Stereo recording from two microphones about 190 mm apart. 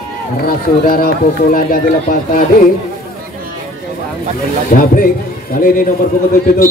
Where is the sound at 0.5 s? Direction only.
50° left (ahead or behind).